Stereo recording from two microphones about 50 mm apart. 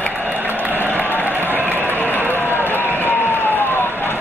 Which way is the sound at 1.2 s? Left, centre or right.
Right.